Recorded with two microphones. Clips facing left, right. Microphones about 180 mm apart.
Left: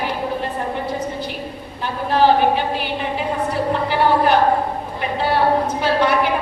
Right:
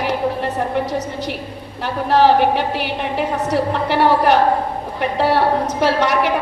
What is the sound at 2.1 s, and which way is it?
Speech, 80° right.